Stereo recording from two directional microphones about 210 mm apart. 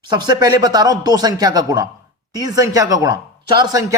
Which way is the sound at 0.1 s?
20° right (ahead or behind).